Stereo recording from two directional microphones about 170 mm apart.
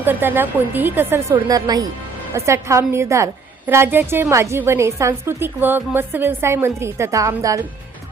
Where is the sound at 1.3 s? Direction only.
20° right (ahead or behind).